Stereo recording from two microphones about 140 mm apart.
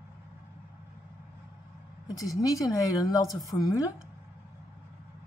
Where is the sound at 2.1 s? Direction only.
25° left (ahead or behind).